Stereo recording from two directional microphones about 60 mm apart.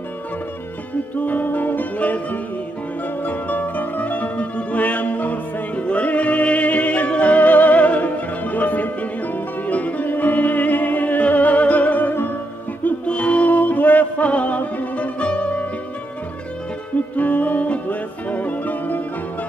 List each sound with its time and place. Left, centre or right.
1.1 s music: left
12.8 s music: left
17.2 s music: left